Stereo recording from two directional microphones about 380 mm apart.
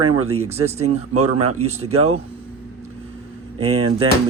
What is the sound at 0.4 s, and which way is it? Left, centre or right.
Speech, centre.